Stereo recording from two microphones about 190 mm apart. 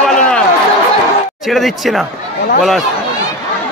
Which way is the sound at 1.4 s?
Centre (ahead or behind).